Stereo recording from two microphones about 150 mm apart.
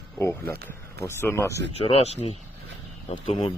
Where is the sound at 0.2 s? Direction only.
20° left (ahead or behind).